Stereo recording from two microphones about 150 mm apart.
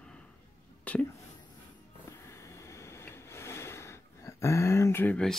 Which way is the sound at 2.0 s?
20° left (ahead or behind).